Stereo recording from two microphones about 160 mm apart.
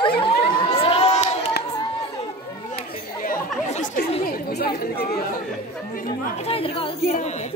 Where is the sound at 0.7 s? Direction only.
40° left (ahead or behind).